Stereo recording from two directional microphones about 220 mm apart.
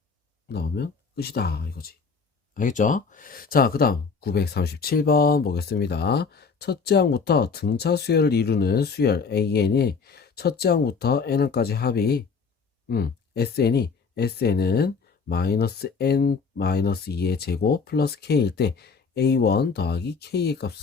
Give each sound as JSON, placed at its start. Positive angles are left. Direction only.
{"t": 0.4, "sound": "speech", "side_deg": 45}